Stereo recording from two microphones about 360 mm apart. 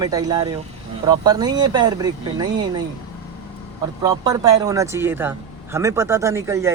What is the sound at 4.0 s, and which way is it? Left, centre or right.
Speech, centre.